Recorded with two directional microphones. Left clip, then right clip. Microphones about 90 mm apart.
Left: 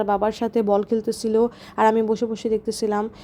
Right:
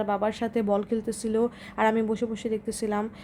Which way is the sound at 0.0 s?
30° left (ahead or behind).